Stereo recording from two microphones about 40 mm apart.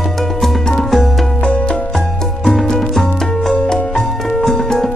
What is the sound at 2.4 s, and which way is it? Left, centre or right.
Music, centre.